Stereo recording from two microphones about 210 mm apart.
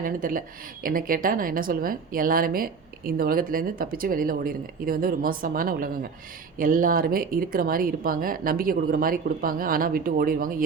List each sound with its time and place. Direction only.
0.0 s a woman's voice: 40° right (ahead or behind)